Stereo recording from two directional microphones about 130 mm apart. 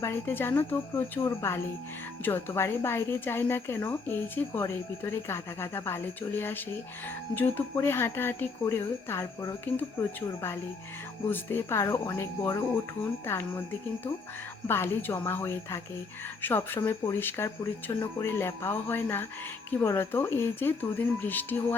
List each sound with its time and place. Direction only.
0.0 s speech: 15° left (ahead or behind)